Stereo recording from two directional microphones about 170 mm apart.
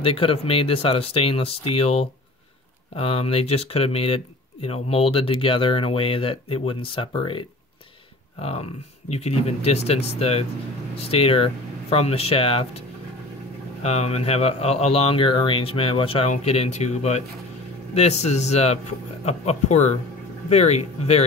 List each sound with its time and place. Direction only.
0.0 s speech: 35° left (ahead or behind)
13.8 s speech: 40° left (ahead or behind)